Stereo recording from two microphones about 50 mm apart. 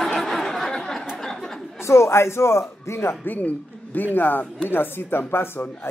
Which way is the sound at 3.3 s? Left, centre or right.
Left.